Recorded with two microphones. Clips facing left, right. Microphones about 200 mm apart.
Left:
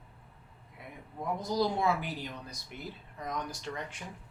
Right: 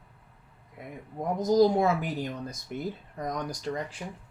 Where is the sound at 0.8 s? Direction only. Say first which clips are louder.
Right 6 dB; 45° right (ahead or behind).